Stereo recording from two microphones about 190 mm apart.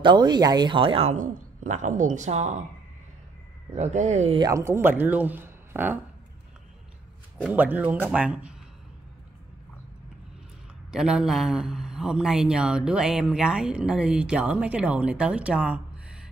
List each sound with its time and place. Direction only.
0.0 s speech: 20° right (ahead or behind); by 2.5 s 40° right (ahead or behind)
3.7 s speech: 35° right (ahead or behind)
4.4 s speech: 15° right (ahead or behind)
7.4 s speech: 10° right (ahead or behind)
10.9 s a man's voice: 5° right (ahead or behind)